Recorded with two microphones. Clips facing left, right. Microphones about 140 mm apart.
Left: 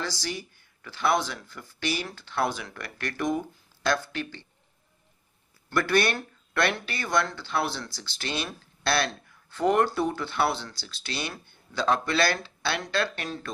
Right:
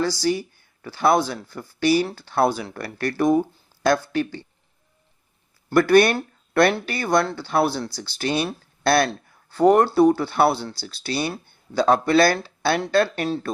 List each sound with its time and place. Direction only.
0.8 s speech: 40° right (ahead or behind)
5.6 s speech: 40° right (ahead or behind)
6.1 s speech: 40° right (ahead or behind)
7.5 s speech: 55° right (ahead or behind); by 13.5 s 35° right (ahead or behind)